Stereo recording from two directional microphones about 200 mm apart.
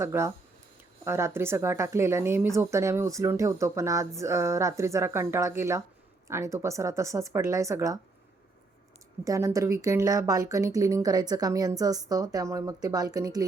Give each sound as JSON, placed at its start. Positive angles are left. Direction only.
{"t": 0.0, "sound": "speech", "side_deg": -15}
{"t": 9.2, "sound": "speech", "side_deg": -15}